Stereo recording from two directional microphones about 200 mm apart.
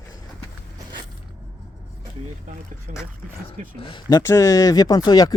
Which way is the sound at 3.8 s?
25° left (ahead or behind).